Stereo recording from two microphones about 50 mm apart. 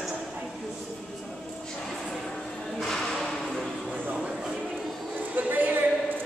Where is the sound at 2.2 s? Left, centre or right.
Centre.